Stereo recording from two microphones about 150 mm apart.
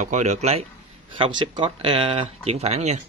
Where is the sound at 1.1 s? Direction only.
35° right (ahead or behind); by 3.0 s 50° right (ahead or behind).